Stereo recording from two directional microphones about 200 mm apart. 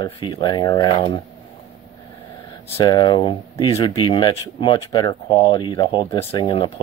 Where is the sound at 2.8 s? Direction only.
20° left (ahead or behind).